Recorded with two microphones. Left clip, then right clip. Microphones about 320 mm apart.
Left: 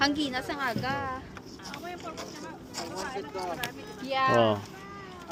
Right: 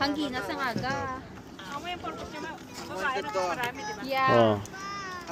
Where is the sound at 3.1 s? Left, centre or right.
Right.